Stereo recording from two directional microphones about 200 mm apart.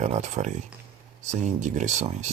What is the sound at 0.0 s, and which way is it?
Speech, 35° right (ahead or behind).